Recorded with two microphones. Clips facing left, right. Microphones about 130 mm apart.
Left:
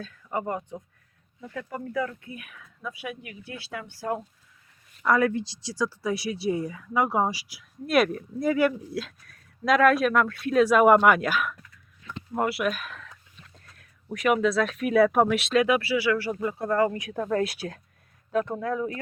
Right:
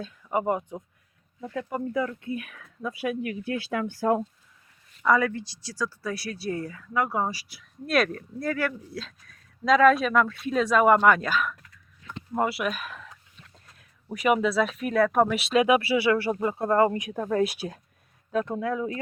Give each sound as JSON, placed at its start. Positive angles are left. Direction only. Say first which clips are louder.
{"t": 0.0, "sound": "speech", "louder": "right 4 dB", "side_deg": -15}
{"t": 2.6, "sound": "speech", "louder": "right 5 dB", "side_deg": -45}
{"t": 5.0, "sound": "speech", "louder": "even", "side_deg": 10}
{"t": 9.0, "sound": "speech", "louder": "left 5 dB", "side_deg": 5}
{"t": 15.5, "sound": "speech", "louder": "right 3 dB", "side_deg": -20}